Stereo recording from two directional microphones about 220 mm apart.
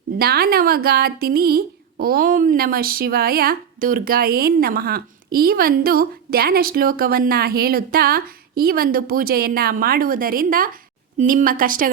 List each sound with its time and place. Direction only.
0.2 s a woman's voice: 45° right (ahead or behind)